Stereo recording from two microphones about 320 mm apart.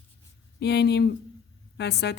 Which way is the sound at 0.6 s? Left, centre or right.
Left.